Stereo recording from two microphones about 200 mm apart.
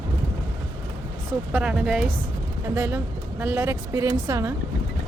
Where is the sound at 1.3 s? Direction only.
5° right (ahead or behind).